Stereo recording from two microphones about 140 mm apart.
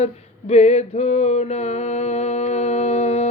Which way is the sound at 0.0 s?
50° left (ahead or behind).